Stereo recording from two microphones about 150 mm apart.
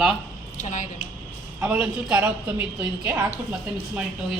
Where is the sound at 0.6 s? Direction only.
60° left (ahead or behind).